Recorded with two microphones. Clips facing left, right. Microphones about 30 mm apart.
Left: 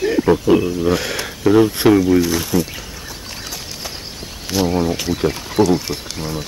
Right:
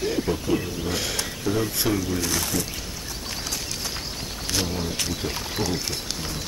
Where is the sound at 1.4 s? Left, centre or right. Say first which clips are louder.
Left 14 dB; left.